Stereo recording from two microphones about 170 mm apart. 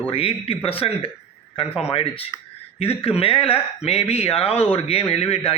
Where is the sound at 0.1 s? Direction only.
35° left (ahead or behind).